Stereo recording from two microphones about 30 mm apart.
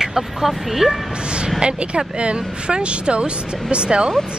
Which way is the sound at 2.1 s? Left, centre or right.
Right.